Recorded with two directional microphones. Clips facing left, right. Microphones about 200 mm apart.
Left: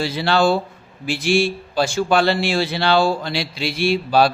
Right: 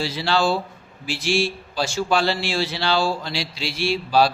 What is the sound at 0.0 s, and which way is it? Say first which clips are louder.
A man's voice: left 4 dB; 55° left (ahead or behind).